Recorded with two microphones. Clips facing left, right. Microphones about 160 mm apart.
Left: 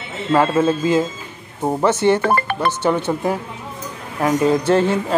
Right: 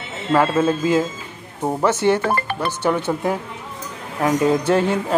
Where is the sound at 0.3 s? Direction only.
10° left (ahead or behind).